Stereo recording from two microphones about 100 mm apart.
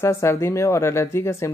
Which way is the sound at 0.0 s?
25° left (ahead or behind).